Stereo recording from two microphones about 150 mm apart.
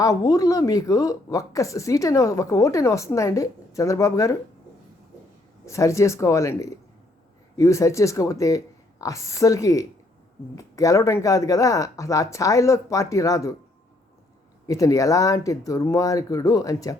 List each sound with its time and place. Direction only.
0.0 s speech: 25° left (ahead or behind)
5.6 s speech: 20° left (ahead or behind)
14.7 s speech: 20° left (ahead or behind)